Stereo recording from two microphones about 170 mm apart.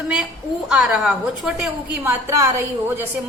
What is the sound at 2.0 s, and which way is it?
A woman's voice, 15° right (ahead or behind).